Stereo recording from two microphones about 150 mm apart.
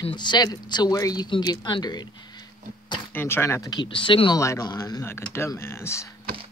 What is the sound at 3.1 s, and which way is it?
Speech, 15° left (ahead or behind).